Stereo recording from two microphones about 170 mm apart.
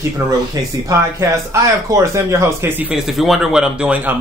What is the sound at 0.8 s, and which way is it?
Speech, 20° right (ahead or behind).